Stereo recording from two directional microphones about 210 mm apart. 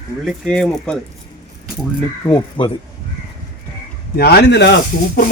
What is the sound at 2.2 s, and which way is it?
Speech, 25° left (ahead or behind).